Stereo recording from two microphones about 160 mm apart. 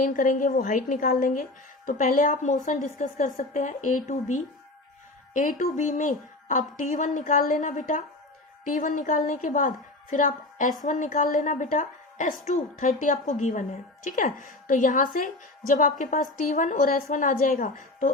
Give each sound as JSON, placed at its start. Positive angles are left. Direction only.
{"t": 0.0, "sound": "a woman's voice", "side_deg": 55}